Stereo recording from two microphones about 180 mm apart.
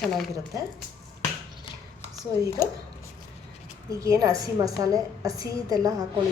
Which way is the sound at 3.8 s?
15° right (ahead or behind).